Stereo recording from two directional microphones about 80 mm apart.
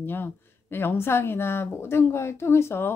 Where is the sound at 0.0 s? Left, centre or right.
Left.